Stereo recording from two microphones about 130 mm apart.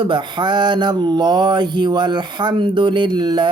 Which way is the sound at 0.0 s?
35° right (ahead or behind).